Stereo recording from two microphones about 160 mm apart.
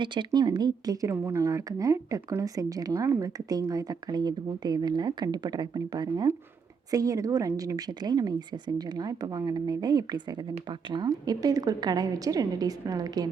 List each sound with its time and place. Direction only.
0.0 s speech: 30° right (ahead or behind)